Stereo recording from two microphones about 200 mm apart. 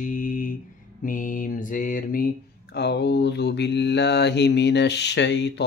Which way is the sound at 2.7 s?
55° left (ahead or behind).